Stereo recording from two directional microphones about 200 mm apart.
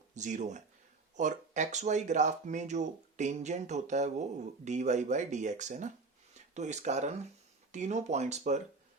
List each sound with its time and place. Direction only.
0.1 s speech: 35° right (ahead or behind)